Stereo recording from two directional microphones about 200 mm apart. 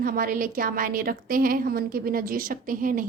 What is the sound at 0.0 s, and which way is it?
A woman's voice, 45° right (ahead or behind).